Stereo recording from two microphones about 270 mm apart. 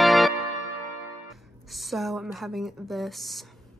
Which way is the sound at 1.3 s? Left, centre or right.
Centre.